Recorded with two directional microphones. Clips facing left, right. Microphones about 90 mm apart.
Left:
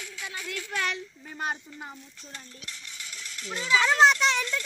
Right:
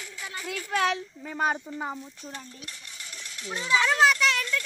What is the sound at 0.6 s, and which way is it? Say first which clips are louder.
Speech: right 6 dB; 55° right (ahead or behind).